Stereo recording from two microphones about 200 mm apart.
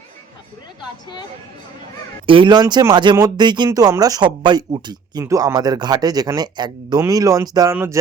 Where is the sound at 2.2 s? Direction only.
25° right (ahead or behind).